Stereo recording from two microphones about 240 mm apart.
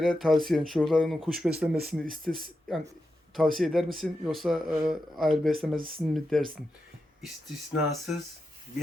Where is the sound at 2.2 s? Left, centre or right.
Right.